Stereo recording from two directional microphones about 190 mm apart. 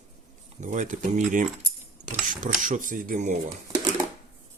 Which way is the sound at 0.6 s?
40° right (ahead or behind).